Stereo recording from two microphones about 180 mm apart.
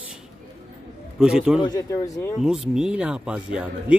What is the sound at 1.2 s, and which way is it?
Speech, 5° right (ahead or behind).